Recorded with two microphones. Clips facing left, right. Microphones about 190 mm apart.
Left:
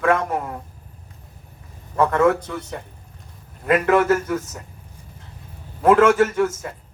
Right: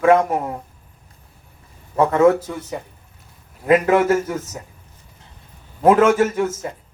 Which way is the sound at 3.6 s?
20° right (ahead or behind).